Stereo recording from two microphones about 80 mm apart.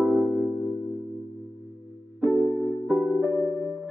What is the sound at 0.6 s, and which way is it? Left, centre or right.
Music, left.